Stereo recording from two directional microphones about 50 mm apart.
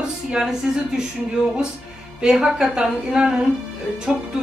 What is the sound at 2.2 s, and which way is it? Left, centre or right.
Speech, centre.